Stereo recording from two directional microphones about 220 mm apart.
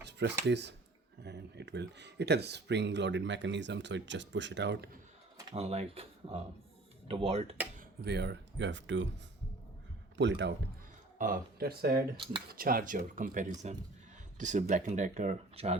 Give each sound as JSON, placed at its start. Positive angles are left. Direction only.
{"t": 0.0, "sound": "a sound", "side_deg": -50}
{"t": 0.4, "sound": "speech", "side_deg": -50}
{"t": 5.5, "sound": "speech", "side_deg": -30}
{"t": 7.8, "sound": "speech", "side_deg": -50}
{"t": 10.2, "sound": "speech", "side_deg": -55}
{"t": 11.2, "sound": "speech", "side_deg": -40}
{"t": 12.1, "sound": "speech", "side_deg": -20}
{"t": 12.5, "sound": "speech", "side_deg": -40}